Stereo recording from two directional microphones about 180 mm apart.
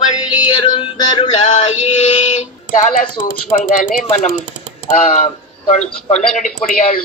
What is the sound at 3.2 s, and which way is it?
Speech, 45° left (ahead or behind).